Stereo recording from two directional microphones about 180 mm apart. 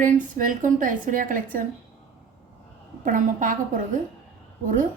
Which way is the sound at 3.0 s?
45° right (ahead or behind).